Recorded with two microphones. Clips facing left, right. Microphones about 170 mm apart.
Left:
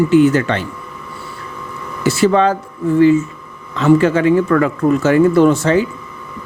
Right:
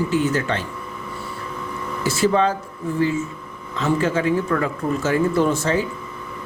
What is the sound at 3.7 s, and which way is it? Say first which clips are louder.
Speech: left 9 dB; 70° left (ahead or behind).